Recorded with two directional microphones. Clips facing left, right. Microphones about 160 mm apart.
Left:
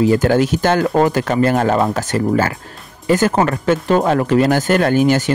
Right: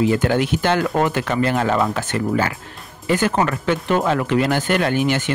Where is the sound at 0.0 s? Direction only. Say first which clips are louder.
Left 4 dB; 40° left (ahead or behind).